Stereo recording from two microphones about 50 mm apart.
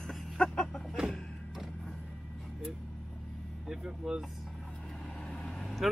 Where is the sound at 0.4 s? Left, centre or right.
Centre.